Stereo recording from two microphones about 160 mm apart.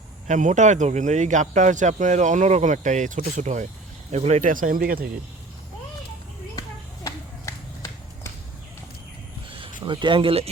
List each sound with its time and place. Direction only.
0.3 s speech: 50° right (ahead or behind); by 5.0 s 65° right (ahead or behind)
6.6 s a sound: 20° left (ahead or behind)
9.8 s speech: 30° right (ahead or behind)